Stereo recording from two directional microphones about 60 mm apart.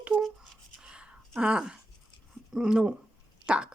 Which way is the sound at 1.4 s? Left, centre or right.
Centre.